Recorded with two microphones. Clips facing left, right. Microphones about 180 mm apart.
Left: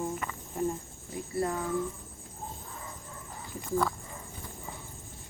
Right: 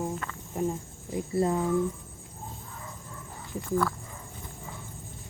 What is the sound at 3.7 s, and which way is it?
Speech, 20° left (ahead or behind).